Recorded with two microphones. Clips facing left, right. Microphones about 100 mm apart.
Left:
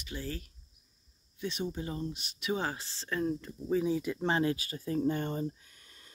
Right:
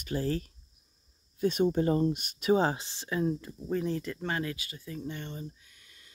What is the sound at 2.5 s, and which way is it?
Speech, 30° right (ahead or behind).